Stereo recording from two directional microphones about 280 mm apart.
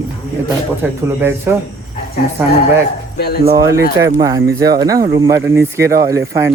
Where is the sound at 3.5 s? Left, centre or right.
Centre.